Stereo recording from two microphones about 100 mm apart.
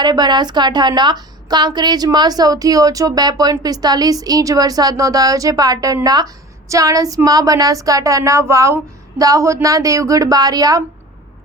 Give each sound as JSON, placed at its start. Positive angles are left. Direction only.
{"t": 0.0, "sound": "a woman's voice", "side_deg": -45}